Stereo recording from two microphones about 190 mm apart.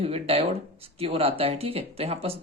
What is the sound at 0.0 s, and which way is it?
Speech, 30° right (ahead or behind).